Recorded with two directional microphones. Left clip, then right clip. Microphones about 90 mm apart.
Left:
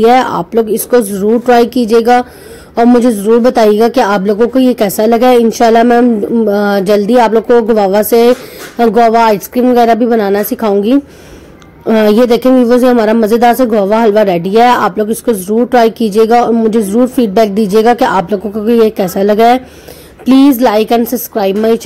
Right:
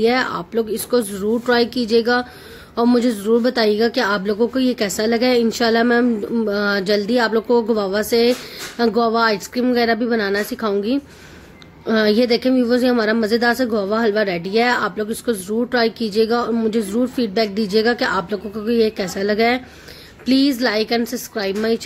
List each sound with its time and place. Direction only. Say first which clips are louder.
0.0 s speech: left 10 dB; 45° left (ahead or behind)
1.5 s speech: left 9 dB; 40° left (ahead or behind)
15.0 s speech: left 10 dB; 35° left (ahead or behind)
15.7 s speech: left 10 dB; 45° left (ahead or behind)
16.7 s speech: left 10 dB; 35° left (ahead or behind)